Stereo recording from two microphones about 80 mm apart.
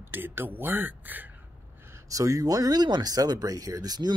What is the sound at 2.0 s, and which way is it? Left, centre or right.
Speech, right.